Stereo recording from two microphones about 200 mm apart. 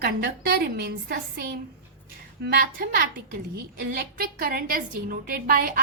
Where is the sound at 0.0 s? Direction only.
55° right (ahead or behind).